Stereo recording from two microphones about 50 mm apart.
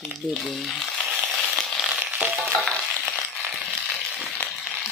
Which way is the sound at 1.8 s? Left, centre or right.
Centre.